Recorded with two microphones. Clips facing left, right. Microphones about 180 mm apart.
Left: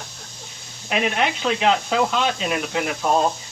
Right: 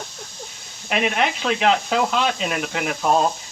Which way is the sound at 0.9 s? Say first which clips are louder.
Right 1 dB; centre (ahead or behind).